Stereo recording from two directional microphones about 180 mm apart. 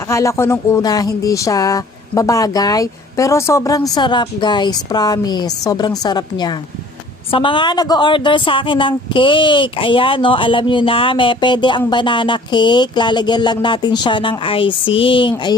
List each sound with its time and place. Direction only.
0.1 s speech: 15° left (ahead or behind)